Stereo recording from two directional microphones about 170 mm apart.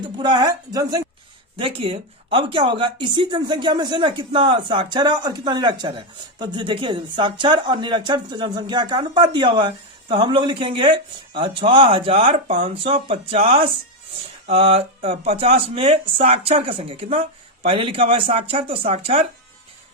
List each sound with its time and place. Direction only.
0.2 s speech: 25° right (ahead or behind)
1.5 s speech: 35° right (ahead or behind)